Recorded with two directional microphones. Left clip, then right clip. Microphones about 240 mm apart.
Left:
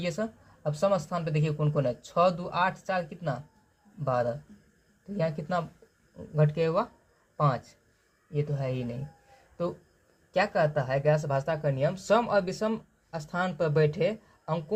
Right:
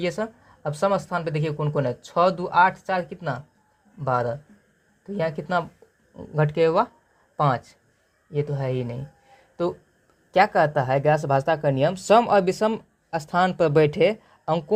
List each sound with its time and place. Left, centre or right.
0.0 s speech: right